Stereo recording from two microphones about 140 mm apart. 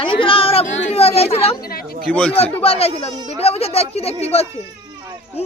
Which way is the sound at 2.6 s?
45° left (ahead or behind).